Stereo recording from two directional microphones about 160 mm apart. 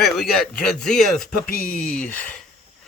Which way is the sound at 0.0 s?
Centre (ahead or behind).